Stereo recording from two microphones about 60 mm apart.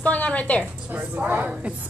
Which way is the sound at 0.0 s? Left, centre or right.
Left.